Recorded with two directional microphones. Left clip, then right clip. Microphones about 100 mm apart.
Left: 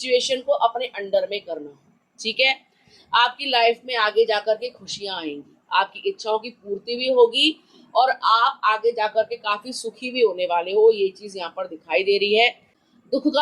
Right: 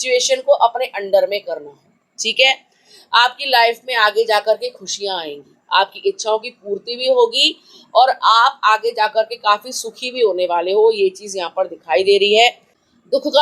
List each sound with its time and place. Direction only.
0.0 s a woman's voice: 70° right (ahead or behind)
2.1 s a woman's voice: 40° right (ahead or behind)
3.1 s a woman's voice: 60° right (ahead or behind)
4.9 s speech: 50° right (ahead or behind)